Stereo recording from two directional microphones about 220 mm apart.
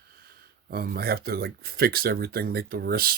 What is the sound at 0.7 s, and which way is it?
Speech, 45° right (ahead or behind).